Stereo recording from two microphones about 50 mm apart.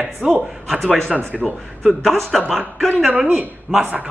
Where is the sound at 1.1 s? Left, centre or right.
Right.